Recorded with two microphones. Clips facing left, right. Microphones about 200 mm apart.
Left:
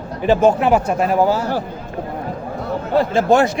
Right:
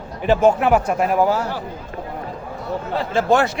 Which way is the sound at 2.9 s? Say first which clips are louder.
Left 4 dB; 45° left (ahead or behind).